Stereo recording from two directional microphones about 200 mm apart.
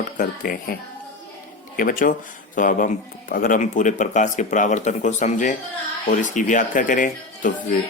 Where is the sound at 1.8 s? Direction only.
45° left (ahead or behind).